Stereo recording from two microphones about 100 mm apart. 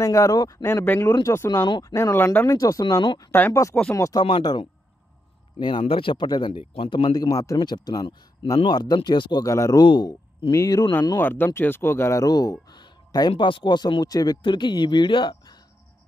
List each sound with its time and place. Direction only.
0.0 s speech: 35° left (ahead or behind)
1.7 s speech: 45° left (ahead or behind)
2.0 s speech: 30° left (ahead or behind)
3.3 s speech: 15° left (ahead or behind)
3.9 s speech: 35° left (ahead or behind)
4.2 s speech: 45° left (ahead or behind)
5.6 s speech: 60° left (ahead or behind)
6.5 s speech: 80° left
6.9 s speech: 50° left (ahead or behind)
9.4 s speech: 35° left (ahead or behind)
9.8 s speech: 50° left (ahead or behind)
10.5 s speech: 35° left (ahead or behind)
11.1 s speech: 20° left (ahead or behind); by 15.6 s 45° left (ahead or behind)